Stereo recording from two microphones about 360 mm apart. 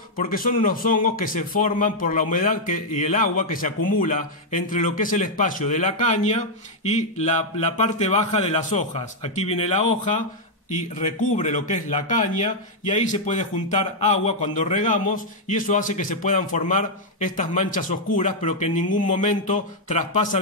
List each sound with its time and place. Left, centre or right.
0.2 s a man's voice: left
11.0 s speech: centre